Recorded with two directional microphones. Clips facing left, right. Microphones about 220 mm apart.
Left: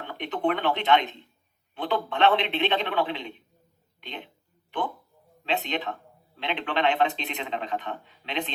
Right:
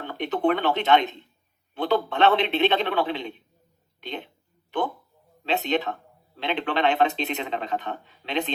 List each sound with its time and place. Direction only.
0.2 s speech: 40° right (ahead or behind)
5.5 s speech: 40° right (ahead or behind)